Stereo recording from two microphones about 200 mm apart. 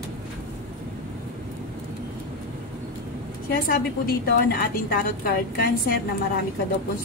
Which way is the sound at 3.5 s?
45° left (ahead or behind).